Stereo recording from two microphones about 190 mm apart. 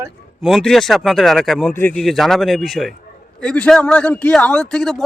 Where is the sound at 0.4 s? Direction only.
Centre (ahead or behind).